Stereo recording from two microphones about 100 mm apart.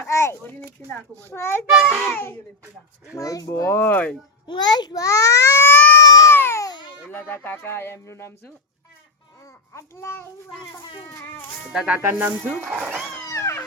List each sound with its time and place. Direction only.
0.1 s speech: 30° left (ahead or behind)
1.7 s a child's voice: centre (ahead or behind)
2.0 s speech: 20° left (ahead or behind)
3.2 s speech: 35° left (ahead or behind); by 4.2 s 15° left (ahead or behind)
4.4 s a child's voice: 45° left (ahead or behind)
5.7 s baby cry: 20° left (ahead or behind)
6.0 s cat: 35° left (ahead or behind)
6.3 s babbling: 25° left (ahead or behind)
6.7 s a sound: 50° left (ahead or behind)
7.1 s speech: 25° left (ahead or behind)
9.7 s speech: 25° left (ahead or behind)
11.7 s speech: 10° right (ahead or behind)
12.1 s speech: 20° right (ahead or behind)
13.2 s a sound: 30° left (ahead or behind)